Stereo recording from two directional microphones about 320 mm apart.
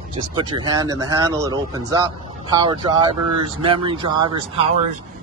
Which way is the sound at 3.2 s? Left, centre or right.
Right.